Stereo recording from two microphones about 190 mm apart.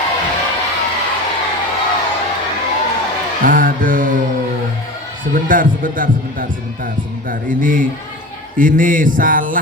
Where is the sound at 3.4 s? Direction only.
45° right (ahead or behind).